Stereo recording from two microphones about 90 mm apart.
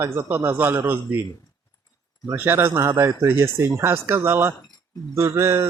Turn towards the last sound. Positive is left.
turn(degrees=-30)  # may be behind; listen again after turning